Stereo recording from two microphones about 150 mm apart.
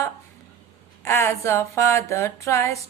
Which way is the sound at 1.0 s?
15° left (ahead or behind).